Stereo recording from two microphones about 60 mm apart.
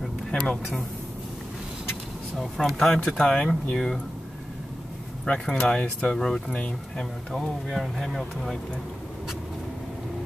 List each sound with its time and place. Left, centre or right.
0.3 s speech: centre
2.3 s speech: centre
3.1 s speech: centre
5.2 s speech: centre
7.3 s speech: centre